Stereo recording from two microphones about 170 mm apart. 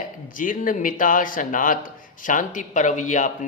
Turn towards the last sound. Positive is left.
turn(degrees=45)  # may be behind; listen again after turning